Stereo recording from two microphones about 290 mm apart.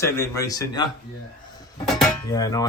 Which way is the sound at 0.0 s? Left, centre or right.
Centre.